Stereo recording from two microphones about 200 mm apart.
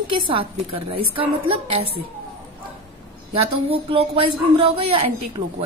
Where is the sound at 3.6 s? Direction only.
30° right (ahead or behind).